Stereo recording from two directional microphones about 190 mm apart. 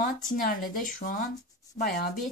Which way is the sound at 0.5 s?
45° left (ahead or behind).